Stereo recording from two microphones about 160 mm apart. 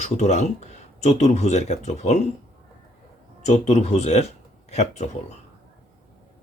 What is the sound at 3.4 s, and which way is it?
Speech, 45° left (ahead or behind).